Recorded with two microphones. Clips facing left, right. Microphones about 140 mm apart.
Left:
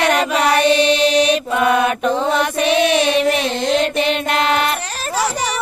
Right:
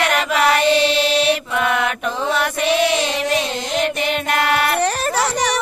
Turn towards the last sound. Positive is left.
turn(degrees=20)  # may be behind; listen again after turning